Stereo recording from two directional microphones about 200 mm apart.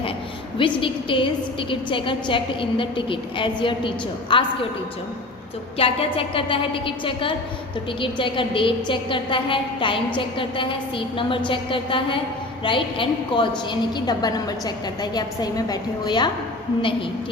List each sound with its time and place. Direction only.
0.8 s a woman's voice: 25° left (ahead or behind)
5.7 s a woman's voice: 30° left (ahead or behind)